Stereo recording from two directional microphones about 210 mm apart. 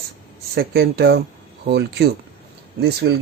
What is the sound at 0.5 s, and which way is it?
Speech, 45° right (ahead or behind).